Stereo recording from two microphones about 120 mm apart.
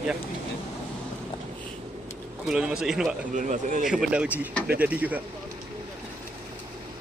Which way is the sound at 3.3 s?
90° right.